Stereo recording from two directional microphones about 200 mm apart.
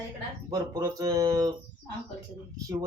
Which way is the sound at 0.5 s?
20° right (ahead or behind).